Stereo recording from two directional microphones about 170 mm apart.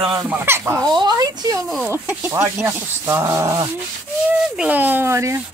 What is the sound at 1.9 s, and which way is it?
Rub, 10° right (ahead or behind).